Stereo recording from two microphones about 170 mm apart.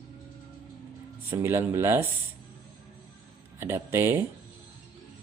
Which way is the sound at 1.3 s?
15° right (ahead or behind).